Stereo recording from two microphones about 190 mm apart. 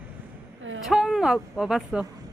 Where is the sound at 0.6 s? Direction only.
90° right.